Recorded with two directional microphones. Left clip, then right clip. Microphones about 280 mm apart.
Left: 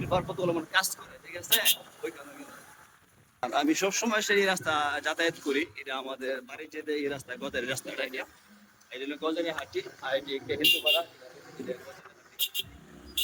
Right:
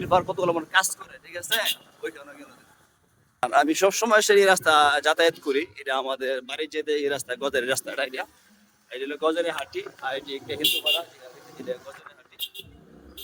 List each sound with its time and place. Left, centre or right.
0.0 s a man's voice: centre
3.4 s a man's voice: centre